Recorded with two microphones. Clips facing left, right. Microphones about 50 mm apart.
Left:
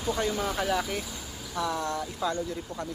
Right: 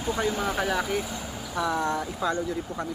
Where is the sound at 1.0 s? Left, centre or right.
Right.